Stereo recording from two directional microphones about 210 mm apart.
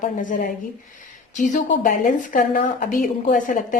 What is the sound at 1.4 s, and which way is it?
A woman's voice, 40° left (ahead or behind).